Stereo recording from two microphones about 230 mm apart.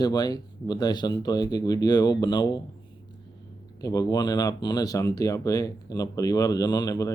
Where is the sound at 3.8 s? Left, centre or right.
Centre.